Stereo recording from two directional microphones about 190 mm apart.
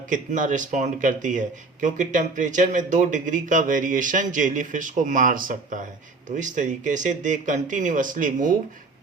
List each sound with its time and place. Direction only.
0.1 s speech: 45° right (ahead or behind)